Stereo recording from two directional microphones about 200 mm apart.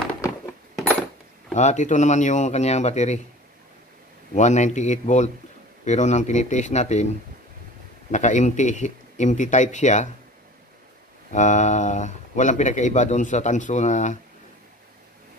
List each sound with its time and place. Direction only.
1.5 s speech: 35° left (ahead or behind)
4.3 s speech: 35° left (ahead or behind)
8.1 s speech: 35° left (ahead or behind)
11.3 s speech: 35° left (ahead or behind)